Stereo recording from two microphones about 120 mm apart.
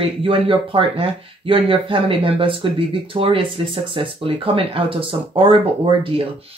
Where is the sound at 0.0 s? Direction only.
45° right (ahead or behind).